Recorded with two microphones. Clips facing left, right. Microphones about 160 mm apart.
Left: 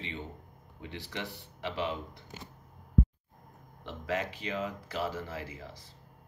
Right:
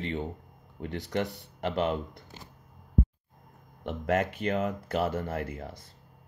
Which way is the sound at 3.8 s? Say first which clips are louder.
Right 6 dB; 55° right (ahead or behind).